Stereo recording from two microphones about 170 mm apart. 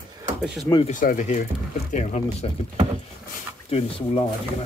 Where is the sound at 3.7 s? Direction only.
35° left (ahead or behind).